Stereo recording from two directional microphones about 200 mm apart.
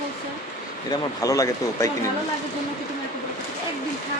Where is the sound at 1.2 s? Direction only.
15° left (ahead or behind).